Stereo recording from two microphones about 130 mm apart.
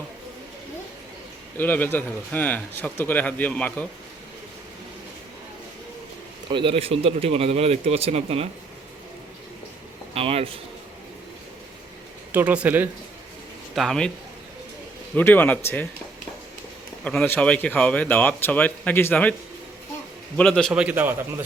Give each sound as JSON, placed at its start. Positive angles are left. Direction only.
{"t": 1.5, "sound": "speech", "side_deg": 15}
{"t": 6.5, "sound": "speech", "side_deg": -45}
{"t": 10.2, "sound": "speech", "side_deg": -50}
{"t": 12.3, "sound": "a man's voice", "side_deg": -10}
{"t": 13.7, "sound": "speech", "side_deg": 5}
{"t": 15.1, "sound": "speech", "side_deg": 15}
{"t": 17.0, "sound": "speech", "side_deg": 10}
{"t": 20.3, "sound": "speech", "side_deg": 10}
{"t": 20.7, "sound": "a man's voice", "side_deg": -10}